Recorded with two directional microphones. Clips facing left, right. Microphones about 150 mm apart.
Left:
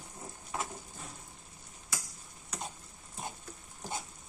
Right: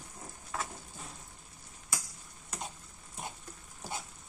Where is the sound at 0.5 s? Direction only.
20° left (ahead or behind).